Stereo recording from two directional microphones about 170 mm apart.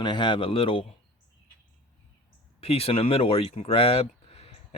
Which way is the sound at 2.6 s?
35° left (ahead or behind).